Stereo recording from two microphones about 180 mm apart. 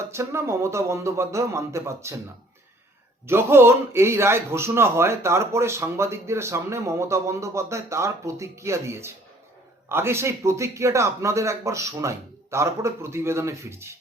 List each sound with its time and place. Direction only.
0.1 s speech: 15° right (ahead or behind)
3.2 s speech: 15° right (ahead or behind)